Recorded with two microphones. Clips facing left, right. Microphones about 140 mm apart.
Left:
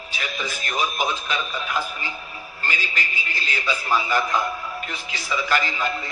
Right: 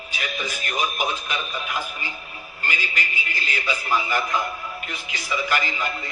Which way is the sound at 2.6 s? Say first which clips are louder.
Even; 15° right (ahead or behind).